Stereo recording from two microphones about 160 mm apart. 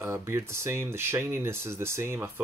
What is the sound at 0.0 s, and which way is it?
Speech, 15° right (ahead or behind).